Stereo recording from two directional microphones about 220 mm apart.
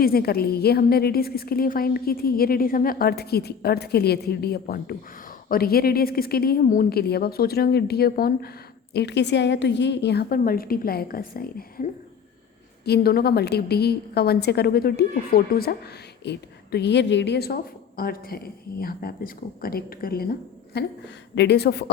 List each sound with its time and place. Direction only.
0.0 s a woman's voice: 45° left (ahead or behind)